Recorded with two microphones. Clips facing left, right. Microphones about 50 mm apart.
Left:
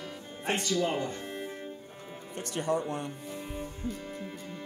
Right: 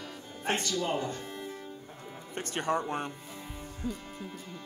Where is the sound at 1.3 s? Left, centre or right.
Left.